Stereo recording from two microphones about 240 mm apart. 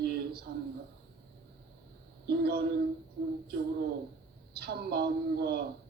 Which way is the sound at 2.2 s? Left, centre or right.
Right.